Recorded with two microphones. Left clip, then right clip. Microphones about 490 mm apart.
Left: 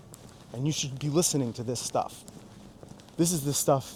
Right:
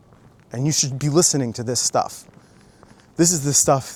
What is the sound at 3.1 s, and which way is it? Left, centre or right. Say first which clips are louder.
Speech: right 10 dB; right.